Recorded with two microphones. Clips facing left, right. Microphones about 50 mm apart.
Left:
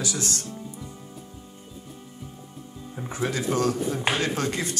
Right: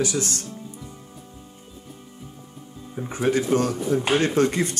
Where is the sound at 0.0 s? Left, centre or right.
Right.